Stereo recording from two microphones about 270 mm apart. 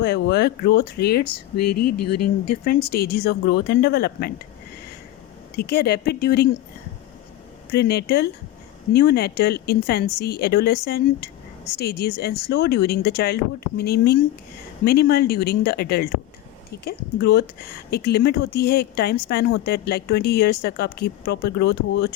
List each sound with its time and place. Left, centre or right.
0.0 s speech: left
1.5 s speech: left
2.8 s speech: left
5.5 s speech: left
7.7 s speech: left